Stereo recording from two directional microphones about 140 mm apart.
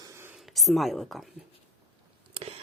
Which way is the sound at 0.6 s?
Centre (ahead or behind).